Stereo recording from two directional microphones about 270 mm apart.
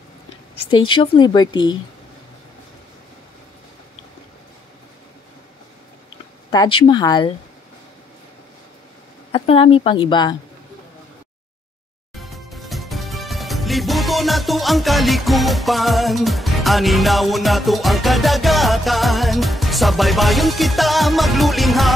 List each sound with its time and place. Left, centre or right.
0.7 s speech: centre
6.5 s speech: centre
9.3 s a woman's voice: centre
12.2 s music: centre